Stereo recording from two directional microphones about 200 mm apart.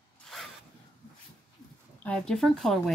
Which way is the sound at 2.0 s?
5° left (ahead or behind).